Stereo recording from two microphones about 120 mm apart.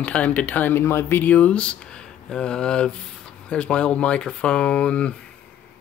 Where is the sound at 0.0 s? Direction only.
10° left (ahead or behind).